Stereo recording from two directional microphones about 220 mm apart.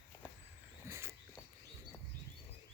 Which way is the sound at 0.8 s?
10° right (ahead or behind).